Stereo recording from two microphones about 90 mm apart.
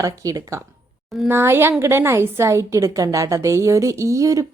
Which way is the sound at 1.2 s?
25° right (ahead or behind).